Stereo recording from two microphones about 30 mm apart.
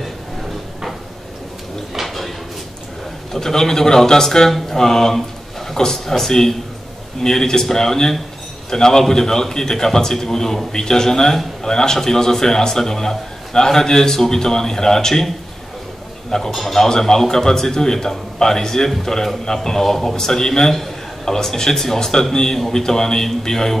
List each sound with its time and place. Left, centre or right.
2.0 s drawer open or close: centre
3.3 s a man's voice: centre
16.3 s a man's voice: centre